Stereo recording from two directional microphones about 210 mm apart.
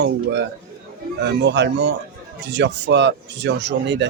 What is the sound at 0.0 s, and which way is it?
Speech, 55° right (ahead or behind).